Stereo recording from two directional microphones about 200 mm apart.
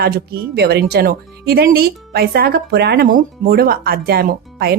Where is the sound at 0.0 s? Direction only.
50° right (ahead or behind).